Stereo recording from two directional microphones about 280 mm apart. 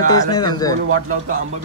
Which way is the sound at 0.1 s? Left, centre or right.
Centre.